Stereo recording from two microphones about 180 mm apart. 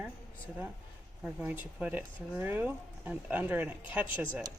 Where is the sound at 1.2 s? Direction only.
10° right (ahead or behind).